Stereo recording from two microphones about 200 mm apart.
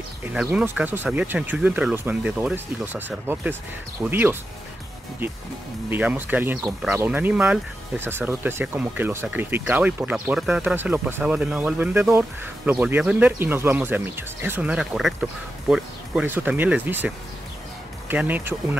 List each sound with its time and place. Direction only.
0.2 s speech: 5° right (ahead or behind)
5.9 s speech: 10° right (ahead or behind)